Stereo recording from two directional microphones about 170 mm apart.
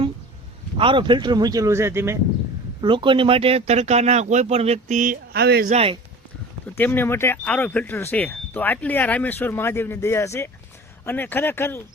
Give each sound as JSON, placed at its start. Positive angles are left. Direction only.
{"t": 0.8, "sound": "speech", "side_deg": -30}
{"t": 2.8, "sound": "speech", "side_deg": -30}
{"t": 5.3, "sound": "speech", "side_deg": -70}
{"t": 5.6, "sound": "speech", "side_deg": -35}
{"t": 6.7, "sound": "speech", "side_deg": 10}